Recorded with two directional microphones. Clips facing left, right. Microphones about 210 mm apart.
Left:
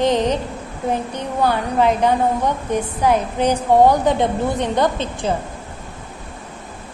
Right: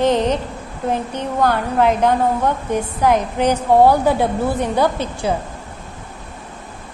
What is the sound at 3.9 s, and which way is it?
A woman's voice, 5° right (ahead or behind).